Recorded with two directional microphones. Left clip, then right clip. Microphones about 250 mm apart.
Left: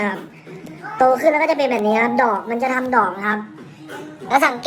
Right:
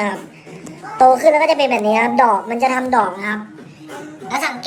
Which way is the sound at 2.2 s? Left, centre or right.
Left.